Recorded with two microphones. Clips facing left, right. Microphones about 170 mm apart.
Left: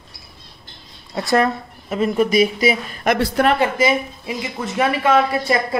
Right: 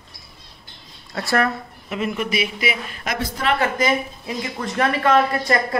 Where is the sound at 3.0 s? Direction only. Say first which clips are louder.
Left 11 dB; 60° left (ahead or behind).